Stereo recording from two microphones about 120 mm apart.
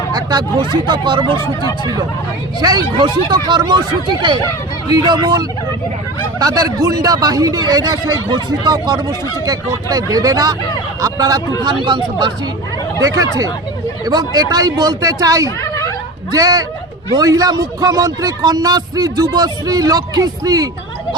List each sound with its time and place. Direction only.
0.1 s speech: 35° right (ahead or behind)
2.6 s speech: 35° right (ahead or behind)
13.0 s speech: 30° right (ahead or behind)
15.4 s a sound: 25° left (ahead or behind)
16.3 s speech: 30° right (ahead or behind)